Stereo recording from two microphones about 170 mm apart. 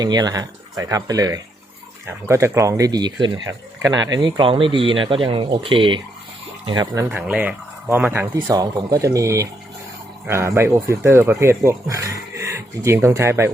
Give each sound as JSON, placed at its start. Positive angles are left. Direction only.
{"t": 0.0, "sound": "speech", "side_deg": -25}
{"t": 7.0, "sound": "speech", "side_deg": -10}
{"t": 8.4, "sound": "speech", "side_deg": -25}